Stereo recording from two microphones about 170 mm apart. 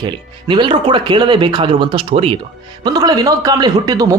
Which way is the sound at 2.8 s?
25° right (ahead or behind).